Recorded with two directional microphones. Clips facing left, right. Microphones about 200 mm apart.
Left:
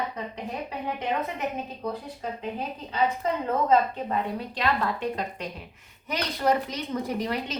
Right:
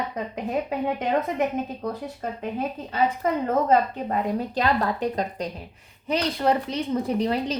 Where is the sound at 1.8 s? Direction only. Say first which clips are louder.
Right 2 dB; 50° right (ahead or behind).